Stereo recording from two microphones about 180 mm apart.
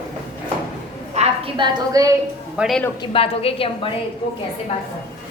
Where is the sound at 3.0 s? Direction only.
30° left (ahead or behind).